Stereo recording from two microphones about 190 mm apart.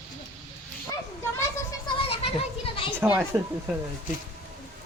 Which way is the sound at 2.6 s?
30° left (ahead or behind).